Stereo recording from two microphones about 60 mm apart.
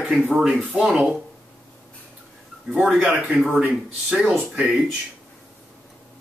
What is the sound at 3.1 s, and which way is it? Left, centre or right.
Speech, right.